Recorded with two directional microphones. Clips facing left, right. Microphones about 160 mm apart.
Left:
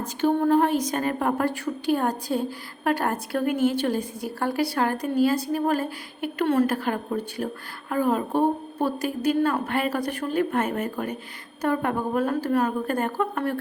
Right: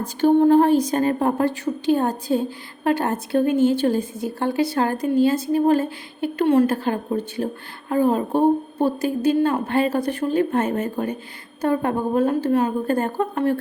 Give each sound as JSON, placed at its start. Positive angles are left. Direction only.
{"t": 0.0, "sound": "a woman's voice", "side_deg": -35}
{"t": 6.4, "sound": "a woman's voice", "side_deg": -15}
{"t": 6.7, "sound": "a woman's voice", "side_deg": -25}